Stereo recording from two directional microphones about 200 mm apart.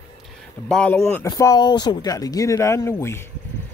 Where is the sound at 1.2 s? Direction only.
20° left (ahead or behind).